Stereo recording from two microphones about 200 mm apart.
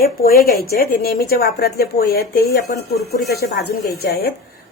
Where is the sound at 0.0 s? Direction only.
50° left (ahead or behind).